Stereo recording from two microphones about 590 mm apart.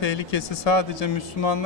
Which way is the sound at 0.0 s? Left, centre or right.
Left.